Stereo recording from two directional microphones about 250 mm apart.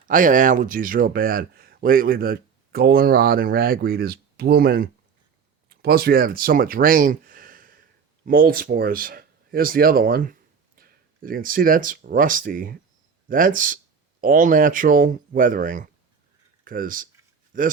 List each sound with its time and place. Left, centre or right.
0.1 s speech: right